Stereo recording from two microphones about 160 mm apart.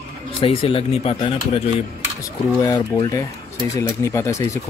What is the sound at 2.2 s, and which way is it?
Speech, 20° left (ahead or behind).